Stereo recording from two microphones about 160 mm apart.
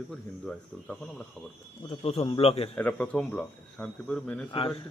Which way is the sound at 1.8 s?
40° left (ahead or behind).